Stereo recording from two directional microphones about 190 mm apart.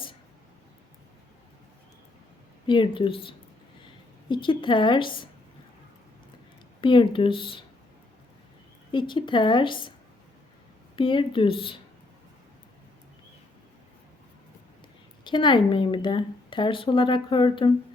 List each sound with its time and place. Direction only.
2.6 s speech: 25° left (ahead or behind)
6.8 s speech: 25° left (ahead or behind)
8.9 s speech: 25° left (ahead or behind)
10.9 s speech: 25° left (ahead or behind)
15.2 s speech: 25° left (ahead or behind)